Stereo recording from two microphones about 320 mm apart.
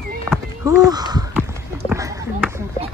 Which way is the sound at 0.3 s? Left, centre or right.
Centre.